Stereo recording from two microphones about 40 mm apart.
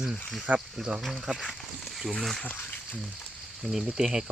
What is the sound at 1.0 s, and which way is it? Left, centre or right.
Speech, centre.